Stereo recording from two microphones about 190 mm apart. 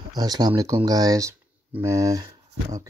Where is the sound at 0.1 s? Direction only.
20° right (ahead or behind).